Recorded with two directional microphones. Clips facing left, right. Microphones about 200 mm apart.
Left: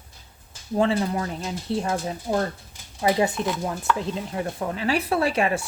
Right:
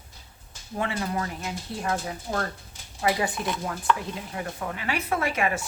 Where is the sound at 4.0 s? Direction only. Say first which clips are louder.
Left 6 dB; 30° left (ahead or behind).